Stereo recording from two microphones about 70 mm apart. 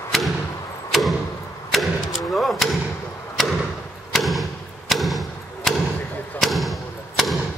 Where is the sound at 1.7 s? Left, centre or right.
Centre.